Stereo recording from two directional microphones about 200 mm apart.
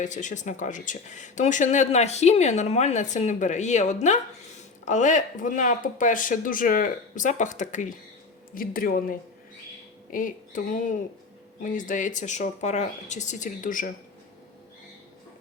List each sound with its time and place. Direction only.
0.0 s speech: 40° left (ahead or behind)